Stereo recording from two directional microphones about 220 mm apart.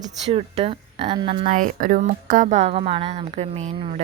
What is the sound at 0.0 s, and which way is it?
A woman's voice, 30° right (ahead or behind).